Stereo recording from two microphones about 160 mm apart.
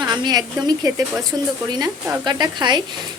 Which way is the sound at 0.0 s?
25° right (ahead or behind).